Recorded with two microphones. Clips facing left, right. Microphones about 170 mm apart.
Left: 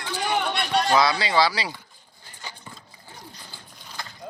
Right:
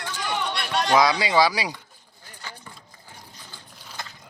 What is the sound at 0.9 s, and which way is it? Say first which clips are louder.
Speech: right 4 dB; 15° right (ahead or behind).